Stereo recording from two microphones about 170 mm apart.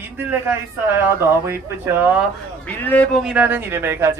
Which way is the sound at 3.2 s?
10° right (ahead or behind).